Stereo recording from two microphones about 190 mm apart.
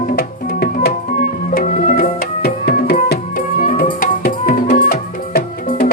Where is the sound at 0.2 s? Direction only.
55° left (ahead or behind).